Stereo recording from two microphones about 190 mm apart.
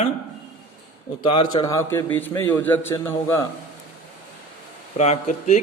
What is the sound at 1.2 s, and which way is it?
A man's voice, 25° left (ahead or behind).